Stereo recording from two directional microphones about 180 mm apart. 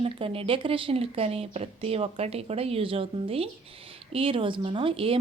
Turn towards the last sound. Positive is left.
turn(degrees=-30)  # may be behind; listen again after turning